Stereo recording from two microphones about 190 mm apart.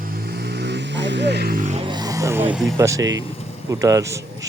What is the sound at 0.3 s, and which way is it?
Vehicle, 60° right (ahead or behind).